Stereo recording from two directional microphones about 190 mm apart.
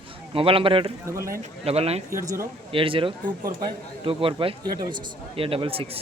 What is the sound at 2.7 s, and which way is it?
Speech, 30° right (ahead or behind).